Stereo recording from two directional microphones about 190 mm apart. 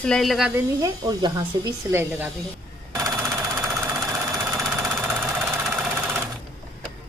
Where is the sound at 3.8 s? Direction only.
15° right (ahead or behind).